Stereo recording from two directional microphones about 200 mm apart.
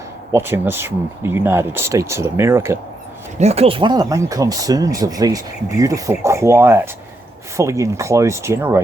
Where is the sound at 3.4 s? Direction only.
30° right (ahead or behind).